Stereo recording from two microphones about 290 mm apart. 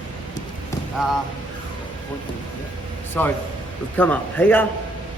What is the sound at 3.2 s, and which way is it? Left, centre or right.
Speech, centre.